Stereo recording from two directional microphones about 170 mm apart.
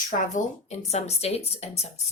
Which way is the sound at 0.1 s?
45° left (ahead or behind).